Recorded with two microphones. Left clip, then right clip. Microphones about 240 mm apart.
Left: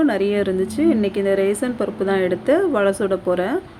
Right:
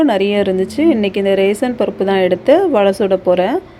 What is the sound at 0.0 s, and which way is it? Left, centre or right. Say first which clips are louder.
Speech: right 5 dB; centre.